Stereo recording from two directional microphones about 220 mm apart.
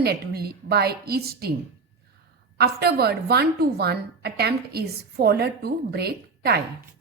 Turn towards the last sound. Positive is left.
turn(degrees=-45)  # may be behind; listen again after turning